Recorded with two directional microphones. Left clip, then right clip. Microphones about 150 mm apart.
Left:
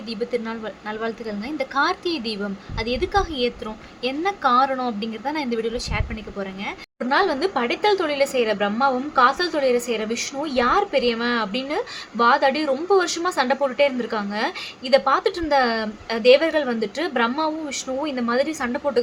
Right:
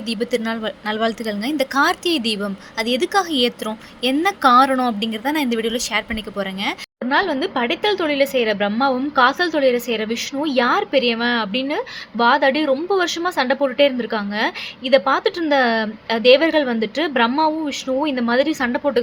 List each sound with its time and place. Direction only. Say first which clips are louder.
0.1 s a woman's voice: right 4 dB; 25° right (ahead or behind)
7.1 s a woman's voice: right 1 dB; 15° right (ahead or behind)